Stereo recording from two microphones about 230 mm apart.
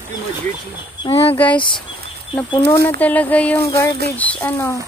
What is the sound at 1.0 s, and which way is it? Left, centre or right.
Speech, left.